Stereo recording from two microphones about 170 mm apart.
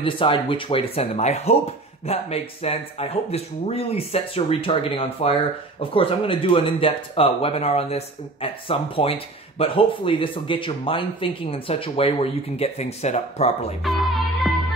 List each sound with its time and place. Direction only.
0.0 s speech: 30° left (ahead or behind)
13.8 s music: centre (ahead or behind)